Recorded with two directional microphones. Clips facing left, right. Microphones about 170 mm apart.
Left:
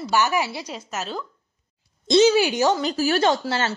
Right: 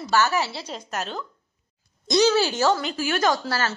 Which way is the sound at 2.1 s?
20° left (ahead or behind).